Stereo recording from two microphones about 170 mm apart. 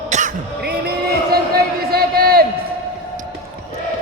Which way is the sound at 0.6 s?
65° right (ahead or behind).